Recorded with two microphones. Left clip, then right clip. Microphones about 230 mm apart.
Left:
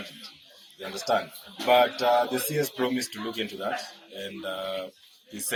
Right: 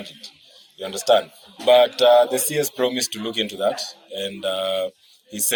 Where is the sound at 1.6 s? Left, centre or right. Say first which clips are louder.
Right 7 dB; right.